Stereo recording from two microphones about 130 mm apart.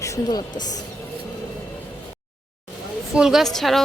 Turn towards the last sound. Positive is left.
turn(degrees=0)  # may be behind; listen again after turning